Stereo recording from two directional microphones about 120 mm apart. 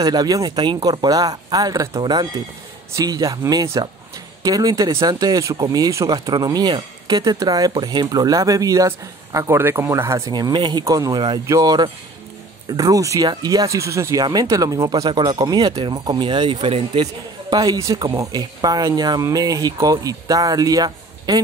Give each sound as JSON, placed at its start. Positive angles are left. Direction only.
{"t": 0.0, "sound": "speech", "side_deg": -35}
{"t": 17.5, "sound": "speech", "side_deg": -30}